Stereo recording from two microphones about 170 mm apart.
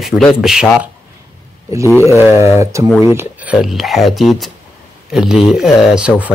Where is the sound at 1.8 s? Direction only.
10° left (ahead or behind).